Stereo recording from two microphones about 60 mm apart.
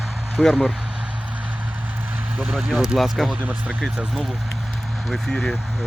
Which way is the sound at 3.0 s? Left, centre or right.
Centre.